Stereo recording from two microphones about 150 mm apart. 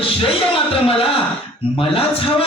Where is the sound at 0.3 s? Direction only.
40° left (ahead or behind).